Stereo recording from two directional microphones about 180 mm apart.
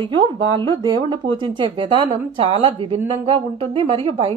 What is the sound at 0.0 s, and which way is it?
A woman's voice, 30° right (ahead or behind).